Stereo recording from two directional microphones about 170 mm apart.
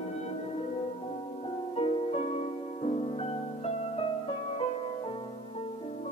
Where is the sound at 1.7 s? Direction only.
35° left (ahead or behind).